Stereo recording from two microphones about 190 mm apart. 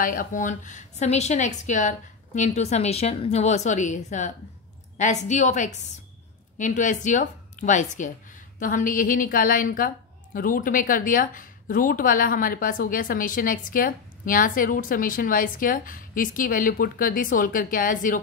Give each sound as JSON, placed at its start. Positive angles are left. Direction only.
{"t": 0.0, "sound": "a woman's voice", "side_deg": 45}